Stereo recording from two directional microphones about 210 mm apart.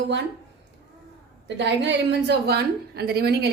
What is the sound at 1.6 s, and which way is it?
A woman's voice, 55° right (ahead or behind).